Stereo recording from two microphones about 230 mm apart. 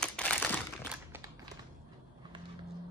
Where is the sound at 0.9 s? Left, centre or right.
Centre.